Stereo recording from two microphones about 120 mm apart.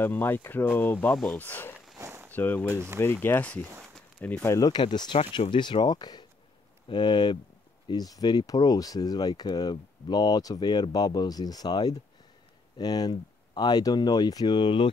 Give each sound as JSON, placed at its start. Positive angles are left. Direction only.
{"t": 0.0, "sound": "speech", "side_deg": 15}
{"t": 2.0, "sound": "a sound", "side_deg": -25}
{"t": 2.3, "sound": "speech", "side_deg": 15}
{"t": 2.7, "sound": "speech", "side_deg": -20}
{"t": 3.0, "sound": "speech", "side_deg": 20}
{"t": 4.6, "sound": "speech", "side_deg": 35}